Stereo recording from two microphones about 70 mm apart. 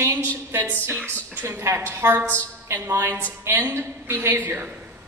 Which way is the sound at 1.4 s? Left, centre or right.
Right.